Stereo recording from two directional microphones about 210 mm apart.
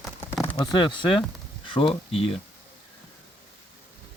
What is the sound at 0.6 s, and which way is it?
Speech, 20° left (ahead or behind).